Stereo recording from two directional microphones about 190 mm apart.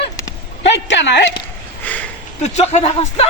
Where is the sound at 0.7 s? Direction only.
70° left (ahead or behind).